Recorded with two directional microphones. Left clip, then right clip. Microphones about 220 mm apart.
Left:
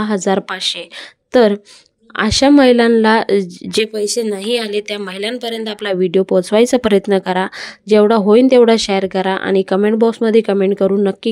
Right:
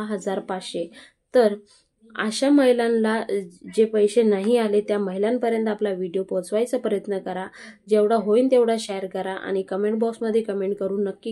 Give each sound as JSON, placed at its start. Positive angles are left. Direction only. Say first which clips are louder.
{"t": 0.0, "sound": "a woman's voice", "louder": "left 11 dB", "side_deg": 40}
{"t": 4.2, "sound": "a woman's voice", "louder": "even", "side_deg": 0}
{"t": 4.5, "sound": "speech", "louder": "left 2 dB", "side_deg": 45}